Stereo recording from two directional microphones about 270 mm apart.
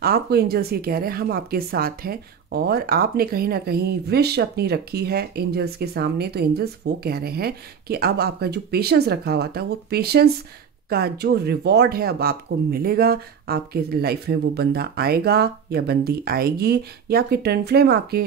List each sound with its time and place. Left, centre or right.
0.0 s speech: right